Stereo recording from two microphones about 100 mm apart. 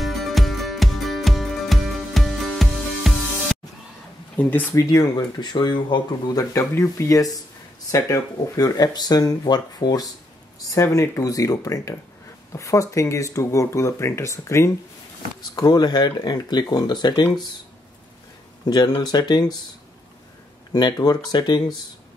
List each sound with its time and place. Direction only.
0.0 s music: centre (ahead or behind)
4.4 s speech: 15° left (ahead or behind)
4.7 s speech: 40° left (ahead or behind)
15.5 s speech: 45° left (ahead or behind)
18.9 s speech: 45° left (ahead or behind)
20.7 s speech: 40° left (ahead or behind)